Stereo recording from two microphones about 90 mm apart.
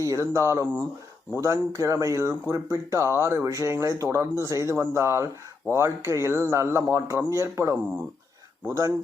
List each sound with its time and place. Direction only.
0.0 s speech: 35° right (ahead or behind)